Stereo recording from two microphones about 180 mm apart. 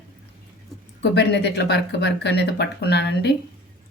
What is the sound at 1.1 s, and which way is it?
A woman's voice, 70° left (ahead or behind).